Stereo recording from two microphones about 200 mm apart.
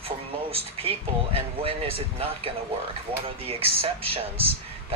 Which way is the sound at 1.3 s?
30° right (ahead or behind).